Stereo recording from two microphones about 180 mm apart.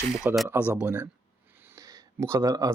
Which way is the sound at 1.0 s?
10° right (ahead or behind).